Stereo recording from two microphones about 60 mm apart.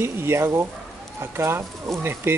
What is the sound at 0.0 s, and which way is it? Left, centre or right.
Speech, right.